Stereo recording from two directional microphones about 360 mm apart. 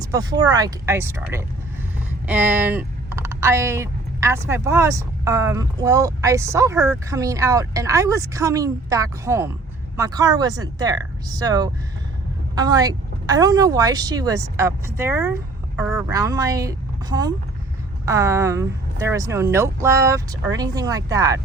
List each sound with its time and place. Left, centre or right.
0.0 s speech: centre
2.2 s speech: centre